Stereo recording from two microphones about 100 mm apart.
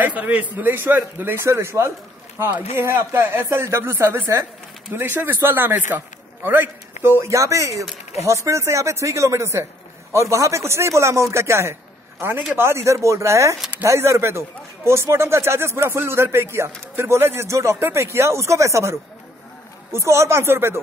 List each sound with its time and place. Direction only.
0.0 s speech: 15° right (ahead or behind)